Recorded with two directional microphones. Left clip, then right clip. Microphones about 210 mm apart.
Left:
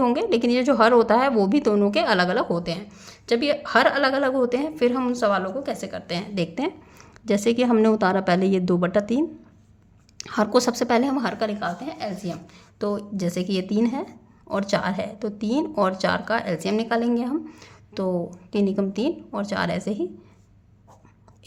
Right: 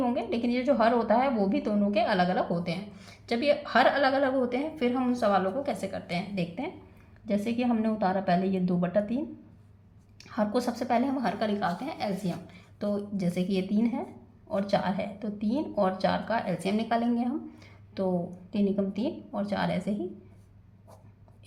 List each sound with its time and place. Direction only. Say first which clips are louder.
0.0 s a woman's voice: left 8 dB; 40° left (ahead or behind)
11.8 s a woman's voice: left 2 dB; 15° left (ahead or behind)